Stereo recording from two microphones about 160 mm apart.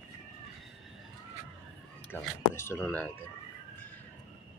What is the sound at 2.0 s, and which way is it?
Speech, 15° left (ahead or behind).